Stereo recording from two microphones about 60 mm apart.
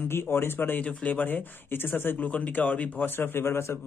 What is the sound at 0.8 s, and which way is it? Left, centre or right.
Speech, left.